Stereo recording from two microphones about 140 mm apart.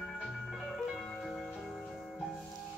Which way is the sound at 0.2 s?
Centre (ahead or behind).